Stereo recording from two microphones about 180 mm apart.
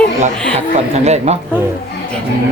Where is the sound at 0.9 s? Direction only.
35° right (ahead or behind).